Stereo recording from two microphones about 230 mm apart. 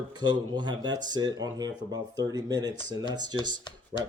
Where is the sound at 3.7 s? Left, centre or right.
Centre.